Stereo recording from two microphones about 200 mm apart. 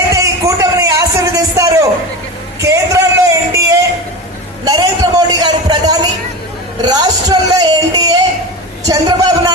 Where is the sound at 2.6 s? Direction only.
15° right (ahead or behind).